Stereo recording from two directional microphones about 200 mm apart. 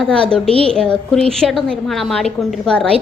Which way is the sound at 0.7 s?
5° left (ahead or behind).